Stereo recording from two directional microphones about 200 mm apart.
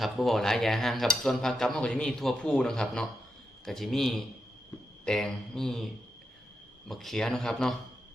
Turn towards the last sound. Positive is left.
turn(degrees=5)  # may be behind; listen again after turning